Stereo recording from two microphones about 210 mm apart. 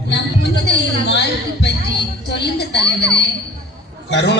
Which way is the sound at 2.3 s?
50° left (ahead or behind).